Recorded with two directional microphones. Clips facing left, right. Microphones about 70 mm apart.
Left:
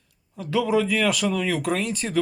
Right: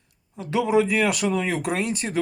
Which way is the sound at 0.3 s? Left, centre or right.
Right.